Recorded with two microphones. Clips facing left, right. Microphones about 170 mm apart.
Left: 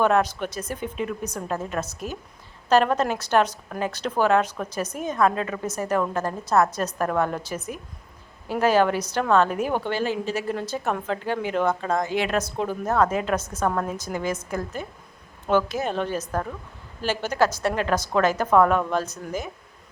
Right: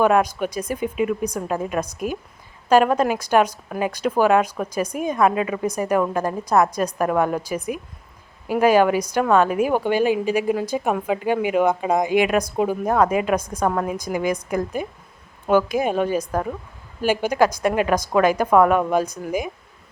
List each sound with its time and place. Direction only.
0.0 s a woman's voice: 10° right (ahead or behind)